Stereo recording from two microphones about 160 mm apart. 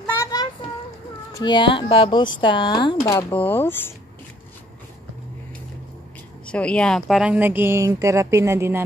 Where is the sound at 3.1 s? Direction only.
15° left (ahead or behind).